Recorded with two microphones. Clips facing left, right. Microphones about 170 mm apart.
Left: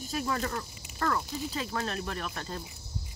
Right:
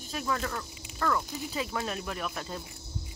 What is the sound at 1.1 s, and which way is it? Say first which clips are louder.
Speech: right 1 dB; 5° right (ahead or behind).